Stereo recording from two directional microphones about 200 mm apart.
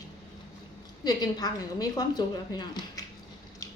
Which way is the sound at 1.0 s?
20° left (ahead or behind).